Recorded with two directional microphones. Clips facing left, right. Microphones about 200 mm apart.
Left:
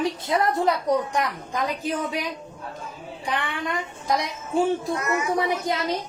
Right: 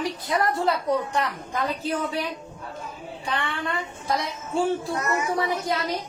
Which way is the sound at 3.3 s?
15° left (ahead or behind).